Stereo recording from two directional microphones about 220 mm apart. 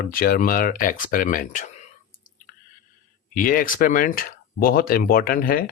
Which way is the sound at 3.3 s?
40° left (ahead or behind).